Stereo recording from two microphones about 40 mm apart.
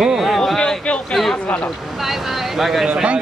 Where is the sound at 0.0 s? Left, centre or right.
Centre.